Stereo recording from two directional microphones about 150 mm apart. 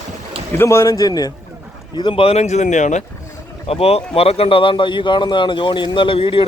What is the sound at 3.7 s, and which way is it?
Speech, 40° left (ahead or behind).